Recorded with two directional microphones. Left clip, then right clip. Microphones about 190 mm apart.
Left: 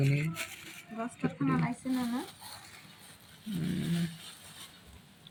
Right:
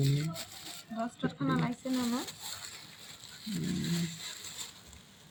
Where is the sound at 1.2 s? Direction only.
45° right (ahead or behind).